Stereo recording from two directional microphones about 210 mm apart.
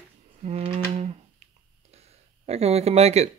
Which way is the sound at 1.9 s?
30° right (ahead or behind).